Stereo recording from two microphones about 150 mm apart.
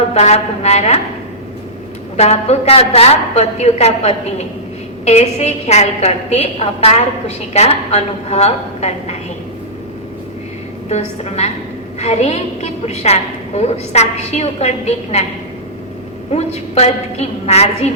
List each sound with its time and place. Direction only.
0.1 s a woman's voice: 45° left (ahead or behind)
2.1 s a woman's voice: 45° left (ahead or behind)
10.8 s a woman's voice: 45° left (ahead or behind)
16.3 s a woman's voice: 45° left (ahead or behind)